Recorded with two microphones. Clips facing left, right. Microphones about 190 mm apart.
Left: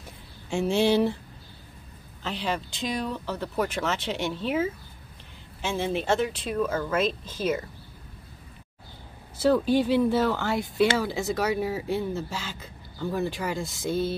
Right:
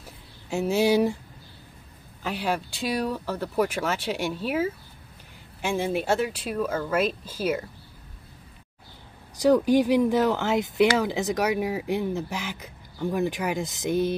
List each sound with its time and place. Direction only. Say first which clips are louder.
0.0 s a sound: left 1 dB; 5° right (ahead or behind)
2.2 s speech: right 2 dB; 10° right (ahead or behind)
9.4 s speech: right 2 dB; 15° right (ahead or behind)